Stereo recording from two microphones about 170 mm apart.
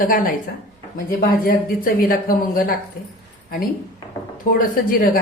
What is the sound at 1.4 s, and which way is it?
Speech, 60° left (ahead or behind).